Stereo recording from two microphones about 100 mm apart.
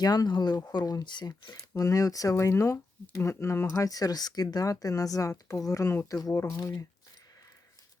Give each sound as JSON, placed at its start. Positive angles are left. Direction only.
{"t": 0.0, "sound": "speech", "side_deg": 40}
{"t": 3.8, "sound": "speech", "side_deg": 40}
{"t": 6.3, "sound": "speech", "side_deg": 25}